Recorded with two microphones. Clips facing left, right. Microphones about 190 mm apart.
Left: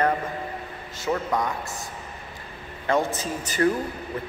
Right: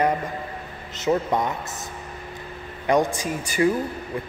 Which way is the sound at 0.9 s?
20° right (ahead or behind).